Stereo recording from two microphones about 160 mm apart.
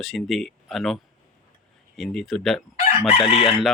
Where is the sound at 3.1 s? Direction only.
40° left (ahead or behind).